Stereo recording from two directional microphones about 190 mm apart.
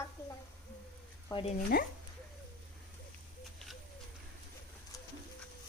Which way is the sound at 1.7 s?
55° left (ahead or behind).